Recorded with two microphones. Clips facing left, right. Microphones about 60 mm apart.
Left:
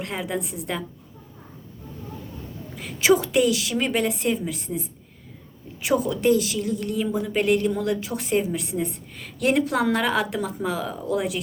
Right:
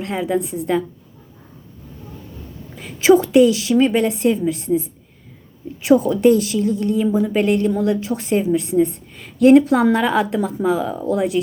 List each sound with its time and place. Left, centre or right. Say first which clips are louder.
0.0 s a woman's voice: right 7 dB; right
3.0 s a woman's voice: right 7 dB; right
6.0 s a woman's voice: right 6 dB; right